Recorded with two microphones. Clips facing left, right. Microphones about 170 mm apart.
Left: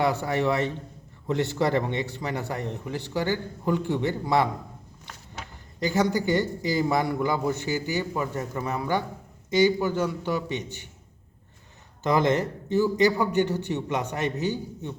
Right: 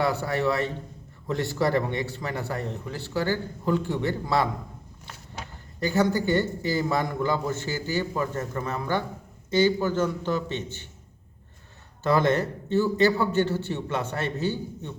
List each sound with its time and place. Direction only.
0.0 s a man's voice: 20° left (ahead or behind)
5.8 s a man's voice: 15° left (ahead or behind)
12.0 s a man's voice: 15° left (ahead or behind)